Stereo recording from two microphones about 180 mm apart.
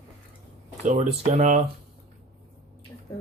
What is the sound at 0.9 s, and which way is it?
Speech, 40° right (ahead or behind).